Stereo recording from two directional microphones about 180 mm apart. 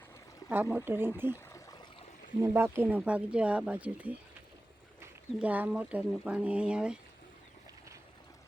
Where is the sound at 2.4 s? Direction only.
10° right (ahead or behind).